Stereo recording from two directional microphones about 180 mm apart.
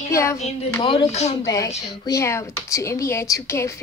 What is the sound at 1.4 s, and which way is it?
A woman's voice, 20° left (ahead or behind).